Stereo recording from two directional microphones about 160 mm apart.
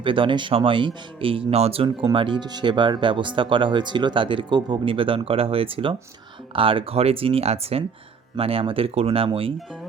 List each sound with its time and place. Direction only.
0.0 s speech: 30° right (ahead or behind)